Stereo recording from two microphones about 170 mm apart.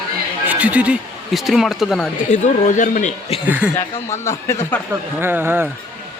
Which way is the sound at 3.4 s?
10° right (ahead or behind).